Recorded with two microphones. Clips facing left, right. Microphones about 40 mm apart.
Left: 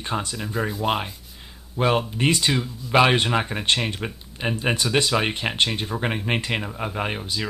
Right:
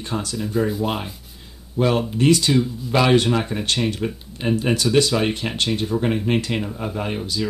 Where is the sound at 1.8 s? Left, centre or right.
Left.